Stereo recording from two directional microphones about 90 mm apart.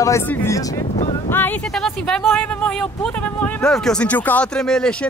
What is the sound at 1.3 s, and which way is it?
Speech, 20° left (ahead or behind).